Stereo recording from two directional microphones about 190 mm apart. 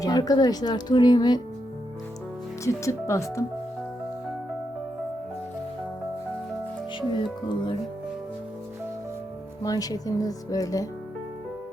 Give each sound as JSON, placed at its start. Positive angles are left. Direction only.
{"t": 0.0, "sound": "speech", "side_deg": 20}
{"t": 2.6, "sound": "speech", "side_deg": 15}
{"t": 7.1, "sound": "speech", "side_deg": 25}
{"t": 9.6, "sound": "speech", "side_deg": 20}